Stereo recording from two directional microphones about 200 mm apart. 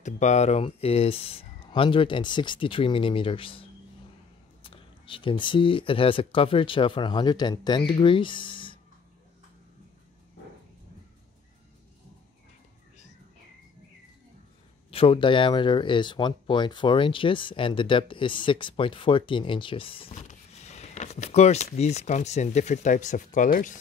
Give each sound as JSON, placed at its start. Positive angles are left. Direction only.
{"t": 0.0, "sound": "speech", "side_deg": 35}
{"t": 4.6, "sound": "speech", "side_deg": 25}
{"t": 14.9, "sound": "speech", "side_deg": 25}